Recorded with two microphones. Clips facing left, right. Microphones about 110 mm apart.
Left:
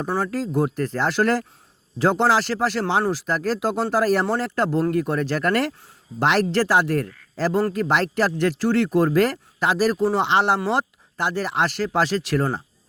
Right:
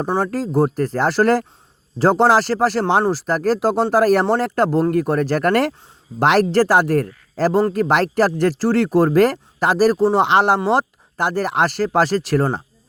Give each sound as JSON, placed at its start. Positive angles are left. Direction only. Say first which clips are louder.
{"t": 0.2, "sound": "speech", "louder": "right 4 dB", "side_deg": -45}
{"t": 3.9, "sound": "speech", "louder": "right 5 dB", "side_deg": -55}